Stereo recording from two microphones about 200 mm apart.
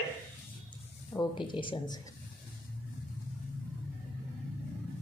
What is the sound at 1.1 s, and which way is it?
Speech, 25° left (ahead or behind).